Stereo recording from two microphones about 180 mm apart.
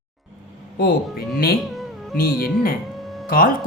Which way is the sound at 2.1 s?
55° left (ahead or behind).